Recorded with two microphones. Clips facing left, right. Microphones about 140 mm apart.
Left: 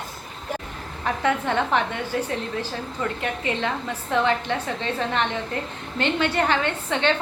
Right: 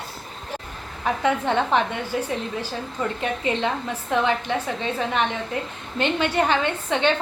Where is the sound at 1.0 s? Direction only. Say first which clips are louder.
Right 1 dB; 15° right (ahead or behind).